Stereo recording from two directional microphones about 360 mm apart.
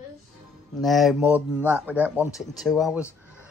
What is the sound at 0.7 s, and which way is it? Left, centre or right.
A child's voice, centre.